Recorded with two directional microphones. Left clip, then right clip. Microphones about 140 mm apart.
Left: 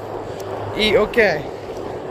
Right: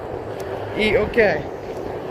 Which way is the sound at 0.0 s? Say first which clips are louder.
Left 1 dB; 5° left (ahead or behind).